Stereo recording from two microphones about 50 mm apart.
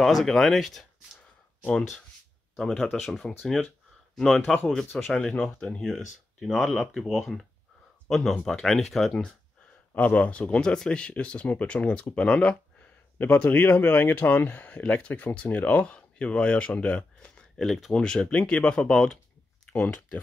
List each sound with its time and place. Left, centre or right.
0.0 s speech: centre
2.6 s speech: centre
3.0 s speech: centre
9.9 s speech: left
17.6 s speech: centre
17.9 s speech: centre
19.6 s a sound: centre